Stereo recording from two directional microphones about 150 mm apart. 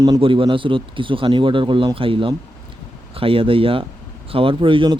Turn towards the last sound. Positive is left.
turn(degrees=-35)  # may be behind; listen again after turning